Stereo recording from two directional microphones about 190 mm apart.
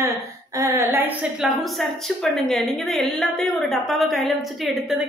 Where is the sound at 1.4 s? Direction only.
Centre (ahead or behind).